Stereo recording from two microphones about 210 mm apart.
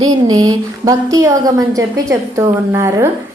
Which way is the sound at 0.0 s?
20° right (ahead or behind).